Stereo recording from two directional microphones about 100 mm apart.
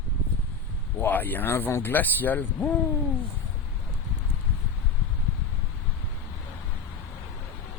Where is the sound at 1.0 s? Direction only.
20° left (ahead or behind).